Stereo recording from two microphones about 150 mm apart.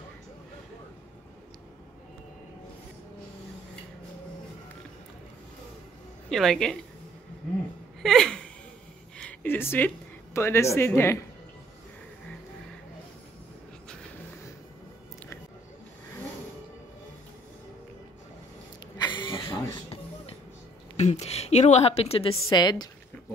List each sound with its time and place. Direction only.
6.3 s a woman's voice: 5° left (ahead or behind)
8.0 s a sound: 5° left (ahead or behind)
9.2 s speech: 10° left (ahead or behind)
18.9 s a sound: 30° left (ahead or behind)
20.9 s a woman's voice: 45° left (ahead or behind)
22.3 s a woman's voice: 30° left (ahead or behind)